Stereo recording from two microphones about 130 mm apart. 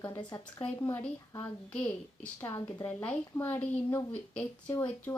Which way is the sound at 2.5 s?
30° left (ahead or behind).